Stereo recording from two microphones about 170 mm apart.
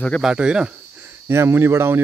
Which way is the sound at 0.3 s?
5° right (ahead or behind).